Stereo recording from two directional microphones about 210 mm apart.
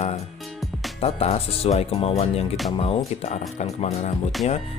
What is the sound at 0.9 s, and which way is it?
Speech, 30° left (ahead or behind).